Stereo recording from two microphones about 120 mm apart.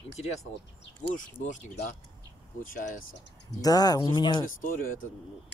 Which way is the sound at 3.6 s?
30° left (ahead or behind).